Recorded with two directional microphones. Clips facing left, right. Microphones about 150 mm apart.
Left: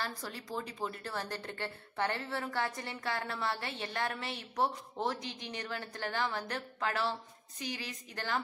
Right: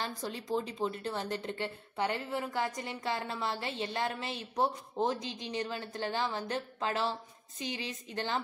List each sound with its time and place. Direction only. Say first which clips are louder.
0.0 s a woman's voice: right 3 dB; 20° right (ahead or behind)